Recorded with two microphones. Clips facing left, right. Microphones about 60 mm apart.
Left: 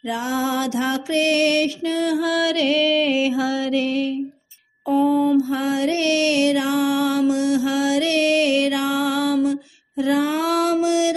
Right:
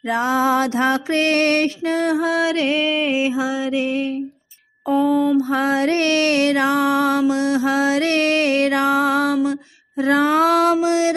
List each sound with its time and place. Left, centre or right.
0.1 s mantra: right
5.0 s mantra: centre
5.5 s music: right
10.0 s female singing: right